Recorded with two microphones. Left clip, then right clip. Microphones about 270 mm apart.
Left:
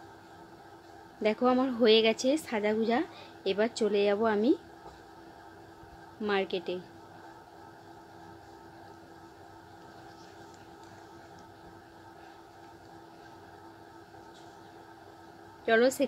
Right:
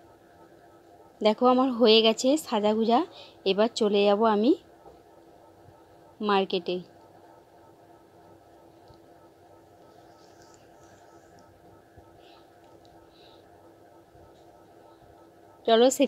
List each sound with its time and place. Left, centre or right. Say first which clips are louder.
1.2 s a woman's voice: right 5 dB; right
6.2 s a woman's voice: right 5 dB; right
15.6 s a woman's voice: right 5 dB; right